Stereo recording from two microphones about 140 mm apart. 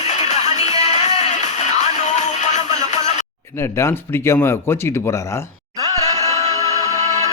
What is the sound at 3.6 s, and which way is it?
Speech, 20° left (ahead or behind).